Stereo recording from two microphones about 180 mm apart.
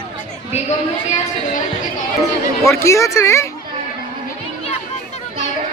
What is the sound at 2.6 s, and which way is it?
Speech, 15° left (ahead or behind).